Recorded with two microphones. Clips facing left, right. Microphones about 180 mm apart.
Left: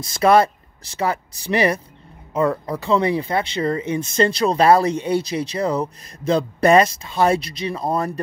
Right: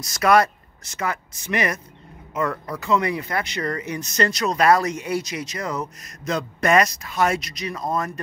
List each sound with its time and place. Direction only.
0.0 s speech: 30° left (ahead or behind)